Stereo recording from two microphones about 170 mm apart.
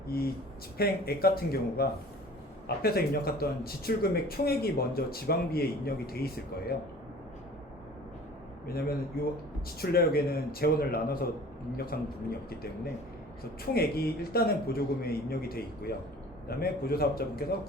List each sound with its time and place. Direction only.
0.1 s speech: 65° left (ahead or behind)
8.6 s speech: 65° left (ahead or behind)
13.7 s speech: 65° left (ahead or behind)